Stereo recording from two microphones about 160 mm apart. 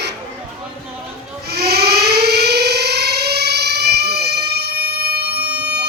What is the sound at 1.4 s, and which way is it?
Civil defense siren, 80° right.